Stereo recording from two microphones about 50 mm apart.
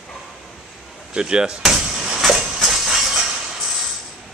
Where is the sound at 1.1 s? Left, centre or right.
Centre.